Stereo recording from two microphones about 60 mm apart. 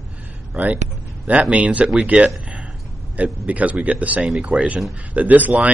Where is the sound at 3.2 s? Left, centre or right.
Right.